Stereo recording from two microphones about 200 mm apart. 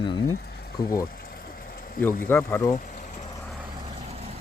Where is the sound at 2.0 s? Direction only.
10° left (ahead or behind).